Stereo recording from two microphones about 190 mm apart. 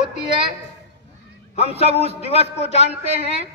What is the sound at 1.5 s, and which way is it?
A man's voice, 35° left (ahead or behind).